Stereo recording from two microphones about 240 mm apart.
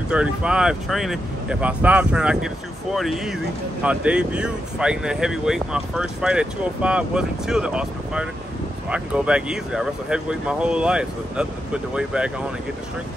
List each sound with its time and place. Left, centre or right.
0.1 s speech: centre